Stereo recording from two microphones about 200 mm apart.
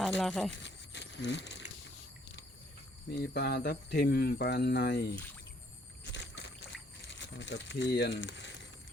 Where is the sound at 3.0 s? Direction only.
55° left (ahead or behind).